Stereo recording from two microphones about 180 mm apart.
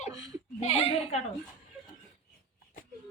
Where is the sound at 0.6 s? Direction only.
35° left (ahead or behind).